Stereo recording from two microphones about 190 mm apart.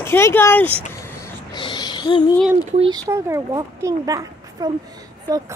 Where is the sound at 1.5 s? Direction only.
25° left (ahead or behind).